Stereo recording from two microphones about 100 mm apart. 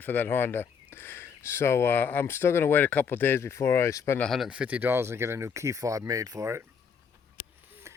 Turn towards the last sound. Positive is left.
turn(degrees=-30)  # may be behind; listen again after turning